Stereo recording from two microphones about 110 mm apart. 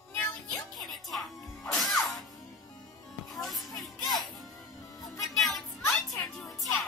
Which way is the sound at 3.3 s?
Centre (ahead or behind).